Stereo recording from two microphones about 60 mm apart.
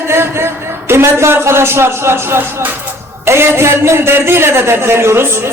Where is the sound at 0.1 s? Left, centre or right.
Right.